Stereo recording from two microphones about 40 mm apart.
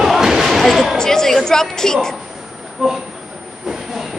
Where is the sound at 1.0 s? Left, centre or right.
Centre.